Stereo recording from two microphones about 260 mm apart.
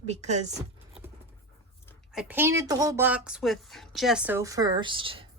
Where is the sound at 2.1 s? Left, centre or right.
Centre.